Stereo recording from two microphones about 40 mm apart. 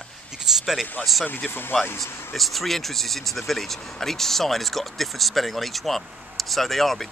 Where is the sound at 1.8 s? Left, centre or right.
Left.